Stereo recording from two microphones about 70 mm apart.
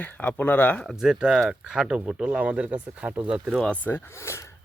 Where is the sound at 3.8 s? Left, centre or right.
Left.